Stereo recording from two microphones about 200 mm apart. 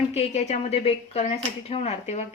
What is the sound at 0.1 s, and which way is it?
Speech, 35° left (ahead or behind).